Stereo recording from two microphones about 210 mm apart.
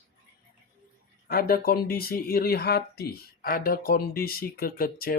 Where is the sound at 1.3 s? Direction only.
45° left (ahead or behind).